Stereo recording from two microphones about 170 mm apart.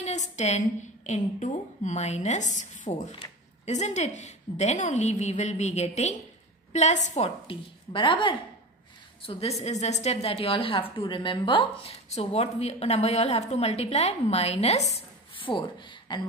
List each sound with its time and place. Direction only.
0.0 s a woman's voice: 40° left (ahead or behind); by 16.3 s 25° left (ahead or behind)